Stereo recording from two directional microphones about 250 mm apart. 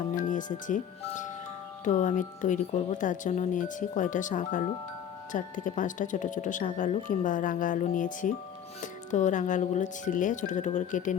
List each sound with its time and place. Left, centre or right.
0.2 s speech: left